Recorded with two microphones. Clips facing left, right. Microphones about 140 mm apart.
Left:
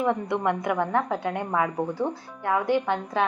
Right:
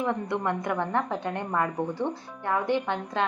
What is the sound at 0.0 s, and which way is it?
A woman's voice, 15° left (ahead or behind).